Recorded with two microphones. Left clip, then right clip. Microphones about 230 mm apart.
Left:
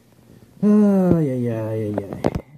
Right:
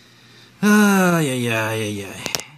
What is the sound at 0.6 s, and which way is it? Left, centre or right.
Speech, centre.